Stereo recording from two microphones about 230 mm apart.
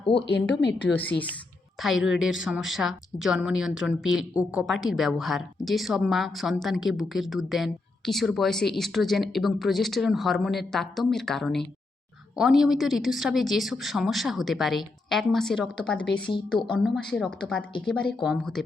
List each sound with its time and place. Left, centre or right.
0.0 s speech: left
0.6 s a woman's voice: left
1.8 s a woman's voice: centre